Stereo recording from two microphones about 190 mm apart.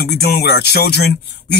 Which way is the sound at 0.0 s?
55° left (ahead or behind).